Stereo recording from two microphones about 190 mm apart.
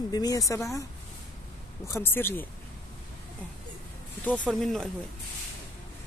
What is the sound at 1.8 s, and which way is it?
Speech, 15° left (ahead or behind).